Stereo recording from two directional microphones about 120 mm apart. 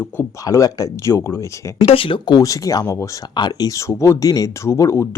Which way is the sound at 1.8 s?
50° left (ahead or behind).